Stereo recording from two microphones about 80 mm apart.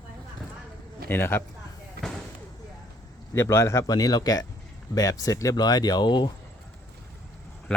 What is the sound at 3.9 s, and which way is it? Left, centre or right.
Speech, left.